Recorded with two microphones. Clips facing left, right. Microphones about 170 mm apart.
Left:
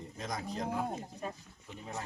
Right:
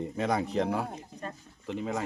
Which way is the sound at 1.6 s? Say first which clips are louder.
Right 12 dB; 90° right.